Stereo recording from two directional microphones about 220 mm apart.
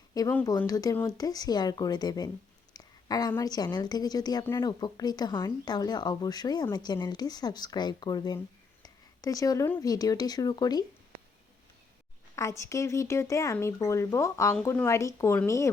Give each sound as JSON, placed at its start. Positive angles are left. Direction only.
{"t": 0.1, "sound": "a woman's voice", "side_deg": 15}
{"t": 12.4, "sound": "a woman's voice", "side_deg": 15}